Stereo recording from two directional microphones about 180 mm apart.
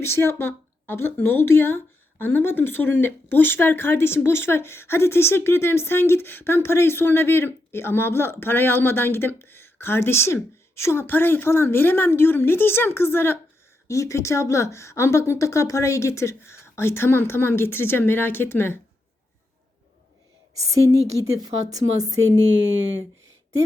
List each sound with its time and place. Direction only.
0.0 s speech: 15° left (ahead or behind)
21.2 s speech: 20° right (ahead or behind)